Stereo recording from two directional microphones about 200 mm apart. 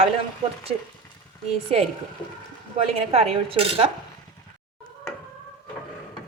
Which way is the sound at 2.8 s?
30° right (ahead or behind).